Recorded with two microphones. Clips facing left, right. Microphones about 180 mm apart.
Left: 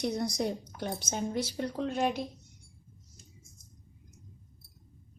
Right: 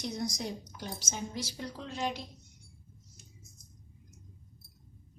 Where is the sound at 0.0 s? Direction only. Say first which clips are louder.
Left 5 dB; 60° left (ahead or behind).